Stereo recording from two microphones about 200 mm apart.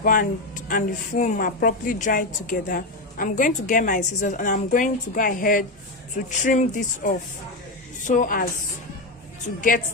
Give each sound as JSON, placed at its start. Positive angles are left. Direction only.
{"t": 0.0, "sound": "a woman's voice", "side_deg": 45}
{"t": 9.6, "sound": "speech", "side_deg": 40}